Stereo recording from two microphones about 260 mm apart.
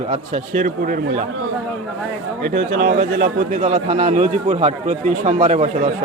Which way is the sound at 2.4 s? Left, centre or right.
Right.